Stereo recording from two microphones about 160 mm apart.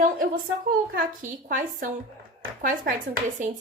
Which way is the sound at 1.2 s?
55° right (ahead or behind).